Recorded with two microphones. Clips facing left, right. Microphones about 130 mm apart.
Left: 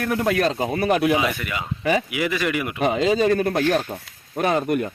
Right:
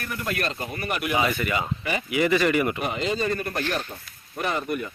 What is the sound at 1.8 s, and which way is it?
Speech, 90° left.